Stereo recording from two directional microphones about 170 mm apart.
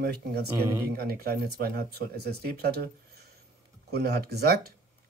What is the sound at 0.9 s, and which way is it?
Speech, 65° right (ahead or behind).